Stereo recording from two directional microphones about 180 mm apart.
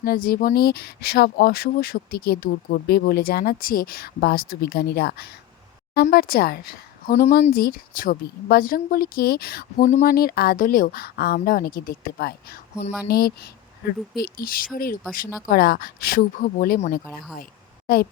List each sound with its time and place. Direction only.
0.0 s speech: 55° left (ahead or behind)
17.8 s speech: 55° left (ahead or behind)